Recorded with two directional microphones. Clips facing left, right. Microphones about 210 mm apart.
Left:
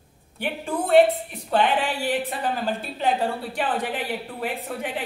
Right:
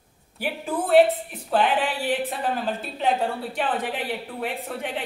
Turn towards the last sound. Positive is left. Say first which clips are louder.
# left 1 dB
turn(degrees=0)  # may be behind; listen again after turning